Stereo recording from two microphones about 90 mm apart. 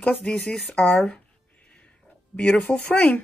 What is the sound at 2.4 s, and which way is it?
Speech, 15° left (ahead or behind).